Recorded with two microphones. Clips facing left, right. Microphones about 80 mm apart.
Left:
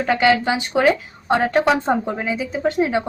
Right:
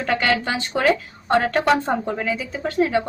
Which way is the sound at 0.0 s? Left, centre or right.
Centre.